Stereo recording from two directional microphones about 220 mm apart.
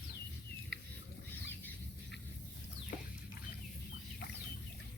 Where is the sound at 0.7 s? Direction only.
55° left (ahead or behind).